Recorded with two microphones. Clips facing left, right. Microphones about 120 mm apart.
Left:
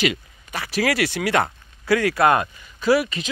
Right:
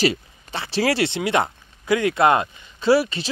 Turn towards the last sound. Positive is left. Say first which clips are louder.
# right 1 dB
turn(degrees=-30)  # may be behind; listen again after turning